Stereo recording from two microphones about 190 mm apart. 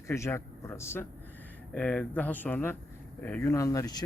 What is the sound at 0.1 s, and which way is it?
Speech, 15° left (ahead or behind).